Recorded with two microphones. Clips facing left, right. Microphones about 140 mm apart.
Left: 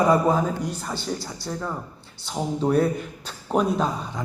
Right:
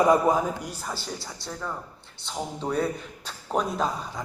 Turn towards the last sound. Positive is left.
turn(degrees=0)  # may be behind; listen again after turning